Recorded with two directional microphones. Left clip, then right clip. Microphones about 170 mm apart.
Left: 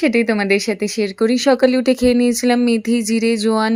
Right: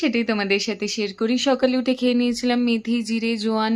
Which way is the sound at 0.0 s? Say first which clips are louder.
Left 6 dB; 30° left (ahead or behind).